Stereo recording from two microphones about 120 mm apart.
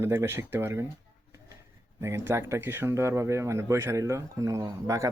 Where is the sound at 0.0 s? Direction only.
20° right (ahead or behind).